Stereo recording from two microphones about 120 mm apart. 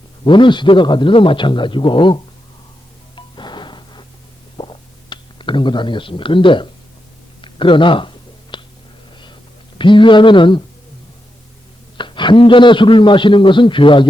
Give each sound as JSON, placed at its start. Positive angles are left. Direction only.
{"t": 0.3, "sound": "a man's voice", "side_deg": 40}
{"t": 3.2, "sound": "music", "side_deg": 40}
{"t": 4.5, "sound": "a sound", "side_deg": 40}
{"t": 9.7, "sound": "a man's voice", "side_deg": 45}
{"t": 11.9, "sound": "a man's voice", "side_deg": 40}